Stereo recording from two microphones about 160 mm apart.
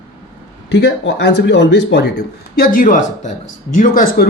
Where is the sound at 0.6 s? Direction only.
90° left.